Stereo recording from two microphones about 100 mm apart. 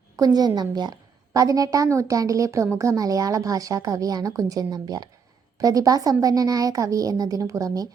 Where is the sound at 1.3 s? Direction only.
35° right (ahead or behind).